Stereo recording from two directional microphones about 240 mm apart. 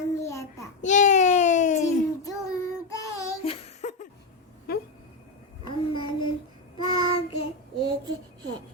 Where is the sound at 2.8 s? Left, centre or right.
Centre; by 4.0 s left.